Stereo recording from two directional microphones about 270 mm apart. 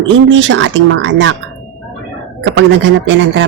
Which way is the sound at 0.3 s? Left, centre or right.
Right.